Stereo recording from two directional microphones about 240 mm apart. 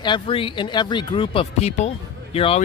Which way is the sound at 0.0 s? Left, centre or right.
Left.